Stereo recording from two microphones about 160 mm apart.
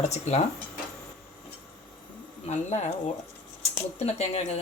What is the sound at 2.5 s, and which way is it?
Speech, 45° left (ahead or behind).